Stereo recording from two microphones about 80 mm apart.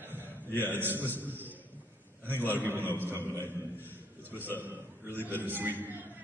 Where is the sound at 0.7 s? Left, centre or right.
Right.